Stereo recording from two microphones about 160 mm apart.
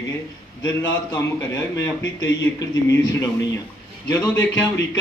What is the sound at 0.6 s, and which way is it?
Speech, 15° left (ahead or behind).